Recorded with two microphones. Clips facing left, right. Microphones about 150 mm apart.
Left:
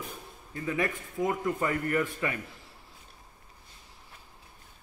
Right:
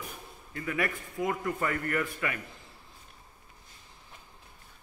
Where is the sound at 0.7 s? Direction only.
25° left (ahead or behind).